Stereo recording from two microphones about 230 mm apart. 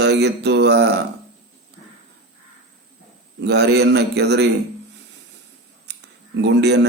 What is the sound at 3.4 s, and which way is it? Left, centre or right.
A man's voice, right.